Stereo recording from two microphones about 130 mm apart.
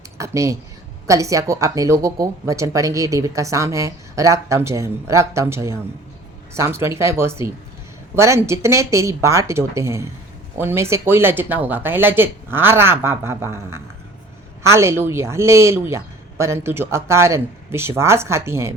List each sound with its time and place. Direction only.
0.2 s speech: 25° right (ahead or behind)